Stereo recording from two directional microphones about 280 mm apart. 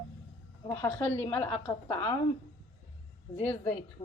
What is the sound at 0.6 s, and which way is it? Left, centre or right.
A woman's voice, centre.